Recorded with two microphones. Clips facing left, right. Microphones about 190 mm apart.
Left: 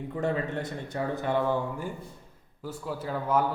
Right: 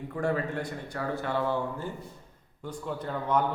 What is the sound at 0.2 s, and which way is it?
A man's voice, 20° left (ahead or behind).